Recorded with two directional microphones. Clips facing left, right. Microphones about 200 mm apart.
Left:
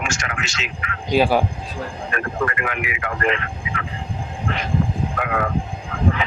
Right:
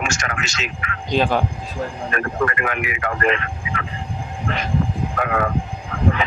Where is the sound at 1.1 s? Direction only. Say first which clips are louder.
Left 2 dB; 10° left (ahead or behind).